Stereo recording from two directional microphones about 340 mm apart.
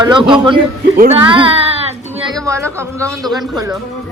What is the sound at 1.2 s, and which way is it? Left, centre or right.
Child singing, centre.